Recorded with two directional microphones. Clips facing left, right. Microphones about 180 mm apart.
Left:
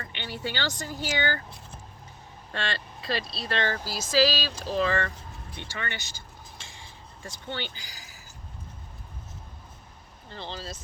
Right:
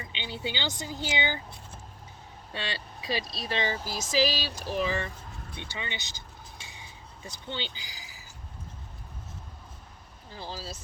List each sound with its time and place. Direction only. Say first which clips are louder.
0.0 s speech: left 1 dB; 15° right (ahead or behind)
2.5 s speech: left 3 dB; 10° right (ahead or behind)
10.2 s speech: left 1 dB; 5° right (ahead or behind)